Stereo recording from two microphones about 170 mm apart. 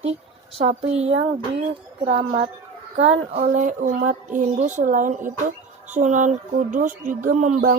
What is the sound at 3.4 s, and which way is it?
Speech, 50° right (ahead or behind).